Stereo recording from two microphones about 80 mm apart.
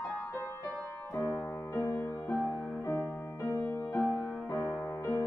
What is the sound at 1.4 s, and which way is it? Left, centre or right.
Music, left.